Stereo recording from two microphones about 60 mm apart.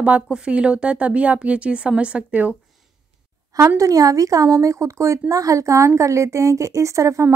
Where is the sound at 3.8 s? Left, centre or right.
Right.